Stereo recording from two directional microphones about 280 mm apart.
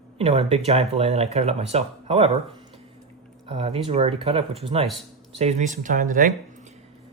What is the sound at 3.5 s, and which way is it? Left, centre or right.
Speech, centre.